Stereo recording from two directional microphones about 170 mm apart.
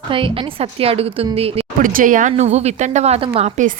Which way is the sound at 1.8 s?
50° right (ahead or behind).